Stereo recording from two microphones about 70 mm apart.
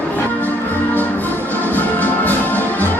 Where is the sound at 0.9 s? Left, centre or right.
Left.